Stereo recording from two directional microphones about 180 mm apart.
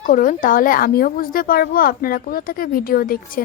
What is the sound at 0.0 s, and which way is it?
Speech, 45° left (ahead or behind).